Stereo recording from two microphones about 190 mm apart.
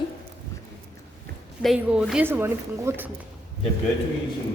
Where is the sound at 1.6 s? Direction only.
5° right (ahead or behind).